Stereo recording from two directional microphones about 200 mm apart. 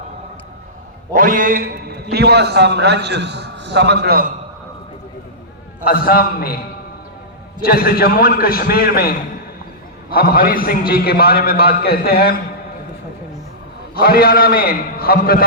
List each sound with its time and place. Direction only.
1.1 s a man's voice: 45° right (ahead or behind)
5.8 s a man's voice: 50° left (ahead or behind)
7.6 s a man's voice: 50° left (ahead or behind)
13.9 s a man's voice: 50° left (ahead or behind)